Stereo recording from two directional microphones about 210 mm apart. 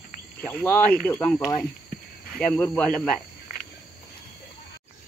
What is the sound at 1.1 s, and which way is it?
Speech, 10° left (ahead or behind).